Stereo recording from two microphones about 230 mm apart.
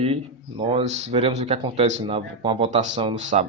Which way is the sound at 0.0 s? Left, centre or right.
Right.